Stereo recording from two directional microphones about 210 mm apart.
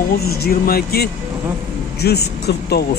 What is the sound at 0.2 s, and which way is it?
Speech, 45° left (ahead or behind).